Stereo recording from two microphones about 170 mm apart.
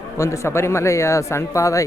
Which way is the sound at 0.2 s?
15° left (ahead or behind).